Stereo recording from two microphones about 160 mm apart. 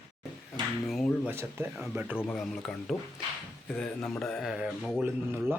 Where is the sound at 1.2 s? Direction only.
15° right (ahead or behind).